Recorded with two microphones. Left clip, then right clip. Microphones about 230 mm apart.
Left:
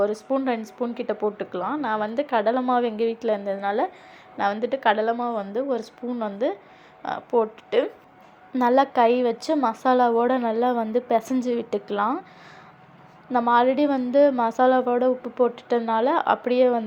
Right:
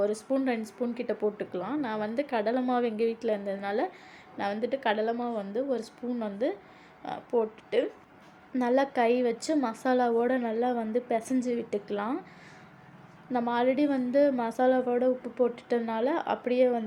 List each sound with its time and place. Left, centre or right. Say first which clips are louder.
0.0 s a woman's voice: left 5 dB; centre
13.3 s a woman's voice: left 8 dB; centre